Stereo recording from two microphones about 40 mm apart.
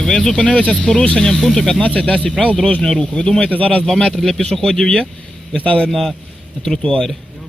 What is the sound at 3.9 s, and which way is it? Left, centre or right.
Speech, centre.